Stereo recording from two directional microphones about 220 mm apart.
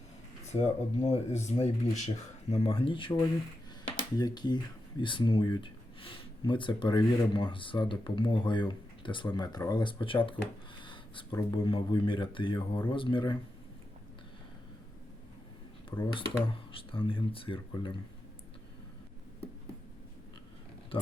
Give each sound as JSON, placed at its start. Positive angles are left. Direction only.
{"t": 0.6, "sound": "speech", "side_deg": 30}
{"t": 10.8, "sound": "a sound", "side_deg": 20}
{"t": 11.5, "sound": "speech", "side_deg": 20}
{"t": 15.9, "sound": "speech", "side_deg": 20}